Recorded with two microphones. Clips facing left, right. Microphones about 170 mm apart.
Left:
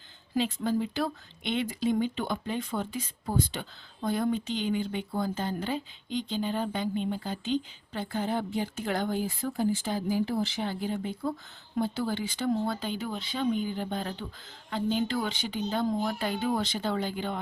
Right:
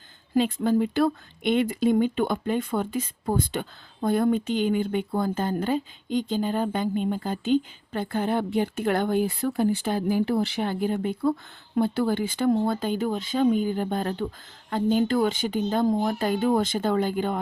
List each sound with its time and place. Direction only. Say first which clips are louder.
0.3 s speech: right 6 dB; 55° right (ahead or behind)